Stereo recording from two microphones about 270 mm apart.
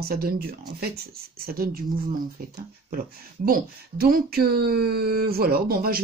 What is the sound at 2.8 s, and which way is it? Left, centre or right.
Speech, right.